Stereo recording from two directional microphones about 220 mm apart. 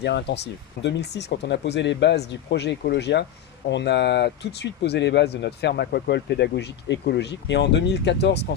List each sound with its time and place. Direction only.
0.0 s speech: 50° left (ahead or behind)